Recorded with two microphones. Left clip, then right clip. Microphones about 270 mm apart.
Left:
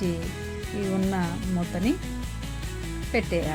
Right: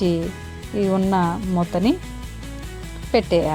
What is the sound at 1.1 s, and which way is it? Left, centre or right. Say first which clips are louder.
Speech: right 9 dB; centre.